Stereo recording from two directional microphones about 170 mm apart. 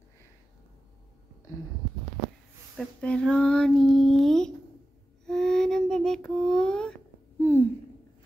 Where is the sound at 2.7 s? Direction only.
5° left (ahead or behind).